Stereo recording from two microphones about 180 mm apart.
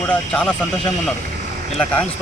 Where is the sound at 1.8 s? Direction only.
5° left (ahead or behind).